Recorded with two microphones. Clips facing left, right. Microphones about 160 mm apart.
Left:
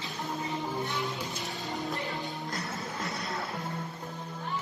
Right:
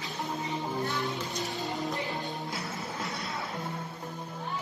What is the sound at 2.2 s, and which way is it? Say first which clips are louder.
Music: even; centre (ahead or behind).